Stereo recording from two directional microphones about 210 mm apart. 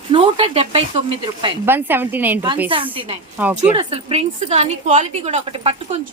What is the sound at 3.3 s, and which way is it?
Speech, 5° right (ahead or behind).